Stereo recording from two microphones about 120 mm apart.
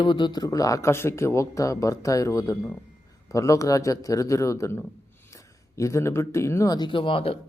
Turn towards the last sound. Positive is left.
turn(degrees=50)  # may be behind; listen again after turning